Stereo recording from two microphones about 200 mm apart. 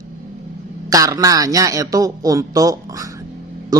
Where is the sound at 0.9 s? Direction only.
15° right (ahead or behind).